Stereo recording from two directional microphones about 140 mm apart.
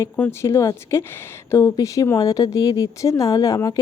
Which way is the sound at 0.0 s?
20° left (ahead or behind).